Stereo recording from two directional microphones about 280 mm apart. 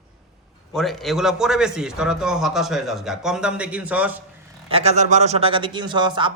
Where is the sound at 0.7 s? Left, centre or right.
Centre.